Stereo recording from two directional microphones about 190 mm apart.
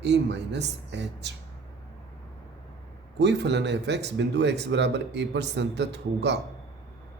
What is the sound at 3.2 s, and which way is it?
Speech, 65° right (ahead or behind).